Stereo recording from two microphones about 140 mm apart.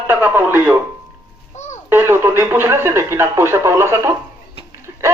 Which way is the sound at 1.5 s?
55° left (ahead or behind).